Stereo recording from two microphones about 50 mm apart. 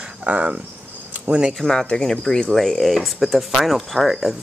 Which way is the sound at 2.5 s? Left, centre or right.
Centre.